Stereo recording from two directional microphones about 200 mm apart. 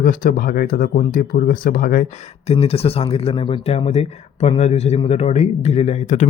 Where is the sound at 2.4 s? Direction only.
30° left (ahead or behind).